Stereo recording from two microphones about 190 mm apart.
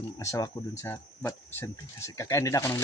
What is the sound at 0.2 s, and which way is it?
Speech, 15° left (ahead or behind).